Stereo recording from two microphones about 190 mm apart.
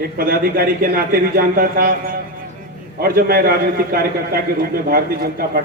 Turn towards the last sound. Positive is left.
turn(degrees=-50)  # may be behind; listen again after turning